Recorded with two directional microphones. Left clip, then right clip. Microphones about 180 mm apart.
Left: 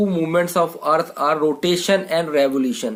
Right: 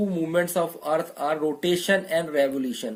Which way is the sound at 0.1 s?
20° left (ahead or behind).